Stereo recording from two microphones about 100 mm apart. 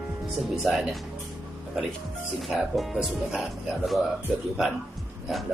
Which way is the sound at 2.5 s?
5° right (ahead or behind).